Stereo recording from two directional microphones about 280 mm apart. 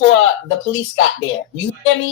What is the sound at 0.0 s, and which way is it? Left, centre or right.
A woman's voice, left.